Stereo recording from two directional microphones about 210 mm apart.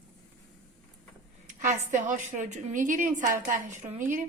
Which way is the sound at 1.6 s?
35° right (ahead or behind).